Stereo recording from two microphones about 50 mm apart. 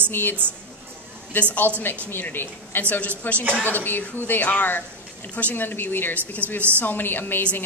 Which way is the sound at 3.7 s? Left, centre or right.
Left.